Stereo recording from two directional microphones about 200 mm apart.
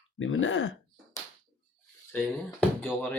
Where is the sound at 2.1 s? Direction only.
10° left (ahead or behind).